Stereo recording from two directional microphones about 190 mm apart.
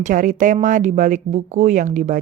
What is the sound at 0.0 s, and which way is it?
A woman's voice, 45° right (ahead or behind).